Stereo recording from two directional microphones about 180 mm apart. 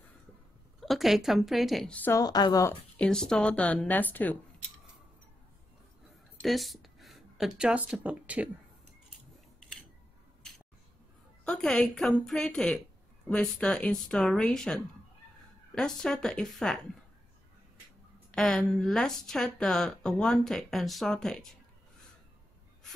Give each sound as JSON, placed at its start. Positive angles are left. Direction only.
{"t": 0.7, "sound": "speech", "side_deg": 0}
{"t": 2.7, "sound": "speech", "side_deg": 5}
{"t": 6.4, "sound": "speech", "side_deg": 0}
{"t": 11.4, "sound": "speech", "side_deg": 5}
{"t": 18.3, "sound": "speech", "side_deg": 5}